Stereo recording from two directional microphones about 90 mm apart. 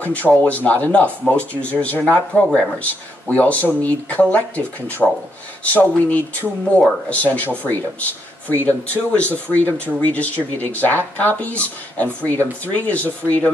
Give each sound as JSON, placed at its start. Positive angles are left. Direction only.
{"t": 0.0, "sound": "speech", "side_deg": 15}
{"t": 1.2, "sound": "speech", "side_deg": 5}
{"t": 1.8, "sound": "speech", "side_deg": 15}
{"t": 6.8, "sound": "speech", "side_deg": 5}
{"t": 7.2, "sound": "speech", "side_deg": 20}